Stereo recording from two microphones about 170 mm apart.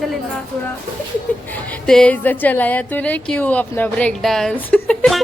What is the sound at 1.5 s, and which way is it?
A woman's voice, 10° left (ahead or behind).